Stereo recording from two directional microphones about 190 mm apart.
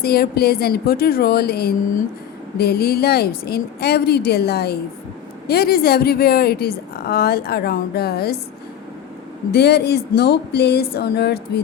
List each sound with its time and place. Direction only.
0.0 s a woman's voice: 55° left (ahead or behind)
9.5 s a woman's voice: 60° left (ahead or behind)